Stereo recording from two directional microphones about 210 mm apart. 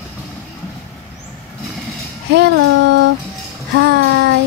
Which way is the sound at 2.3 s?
55° right (ahead or behind).